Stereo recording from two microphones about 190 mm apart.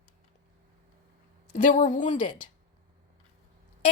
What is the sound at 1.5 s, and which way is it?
Speech, 40° left (ahead or behind).